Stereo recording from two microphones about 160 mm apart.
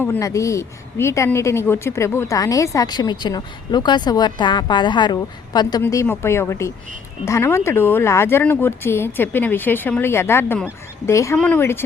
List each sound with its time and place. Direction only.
0.0 s speech: 15° left (ahead or behind)